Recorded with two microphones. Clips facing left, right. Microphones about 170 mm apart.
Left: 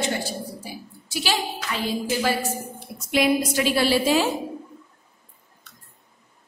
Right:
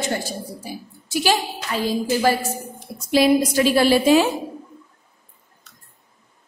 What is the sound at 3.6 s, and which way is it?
Speech, 45° right (ahead or behind).